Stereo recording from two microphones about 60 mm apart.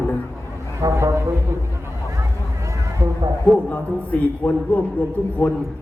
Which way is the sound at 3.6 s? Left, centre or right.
Left.